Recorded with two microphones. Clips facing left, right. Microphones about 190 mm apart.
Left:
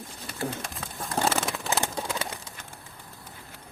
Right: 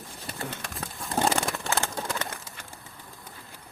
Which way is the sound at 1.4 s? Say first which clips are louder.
Even; centre (ahead or behind).